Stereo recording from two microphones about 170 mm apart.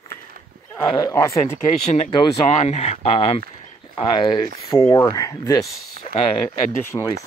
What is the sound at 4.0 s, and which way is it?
Speech, 25° left (ahead or behind).